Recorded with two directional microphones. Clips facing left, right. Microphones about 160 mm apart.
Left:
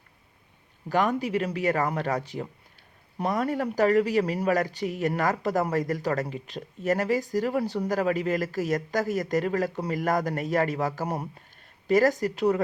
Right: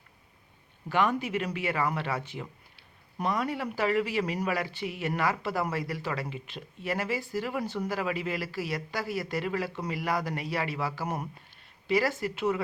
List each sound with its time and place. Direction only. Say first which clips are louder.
0.9 s speech: left 3 dB; 40° left (ahead or behind)